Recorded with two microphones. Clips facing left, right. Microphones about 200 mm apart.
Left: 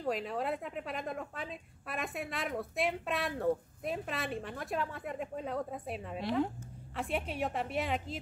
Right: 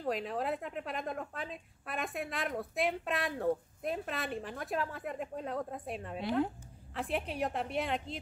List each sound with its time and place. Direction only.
0.0 s a woman's voice: centre (ahead or behind)